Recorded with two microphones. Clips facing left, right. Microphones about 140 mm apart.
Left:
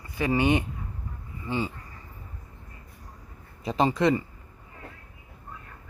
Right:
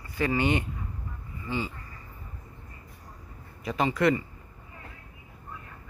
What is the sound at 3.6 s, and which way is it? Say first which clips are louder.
Speech: left 2 dB; 30° left (ahead or behind).